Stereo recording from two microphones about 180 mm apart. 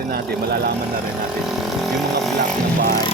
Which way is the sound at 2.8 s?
55° right (ahead or behind).